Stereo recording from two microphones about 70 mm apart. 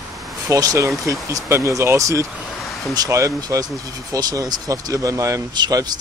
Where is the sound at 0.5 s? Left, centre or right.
Right.